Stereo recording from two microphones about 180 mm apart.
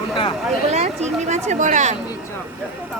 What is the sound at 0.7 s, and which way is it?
Speech, 40° right (ahead or behind).